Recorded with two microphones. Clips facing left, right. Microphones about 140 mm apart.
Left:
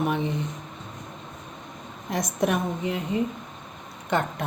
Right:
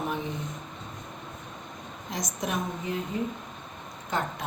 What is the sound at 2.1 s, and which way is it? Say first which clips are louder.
Speech: left 8 dB; 60° left (ahead or behind).